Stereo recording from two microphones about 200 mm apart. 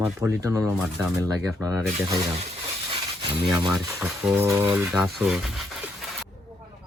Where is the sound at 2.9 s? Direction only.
25° right (ahead or behind).